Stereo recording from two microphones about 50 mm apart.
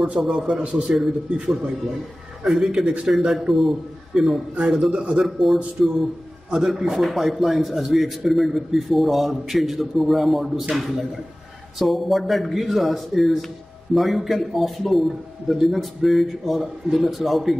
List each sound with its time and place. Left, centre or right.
0.2 s a man's voice: centre
0.6 s a man's voice: right
0.9 s a man's voice: centre
4.9 s a man's voice: right
5.2 s a man's voice: centre
11.8 s a man's voice: centre